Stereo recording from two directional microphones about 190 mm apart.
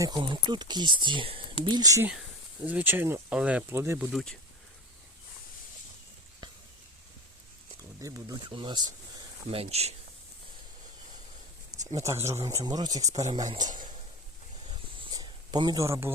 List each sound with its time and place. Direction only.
0.0 s speech: 25° right (ahead or behind); by 4.2 s 10° right (ahead or behind)
8.0 s speech: 20° right (ahead or behind)
11.9 s speech: 15° right (ahead or behind)
14.7 s a sound: 25° right (ahead or behind)